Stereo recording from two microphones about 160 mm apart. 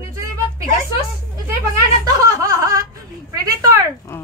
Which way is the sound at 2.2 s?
20° right (ahead or behind).